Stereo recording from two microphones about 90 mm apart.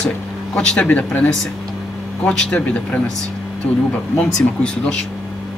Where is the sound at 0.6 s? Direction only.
15° left (ahead or behind).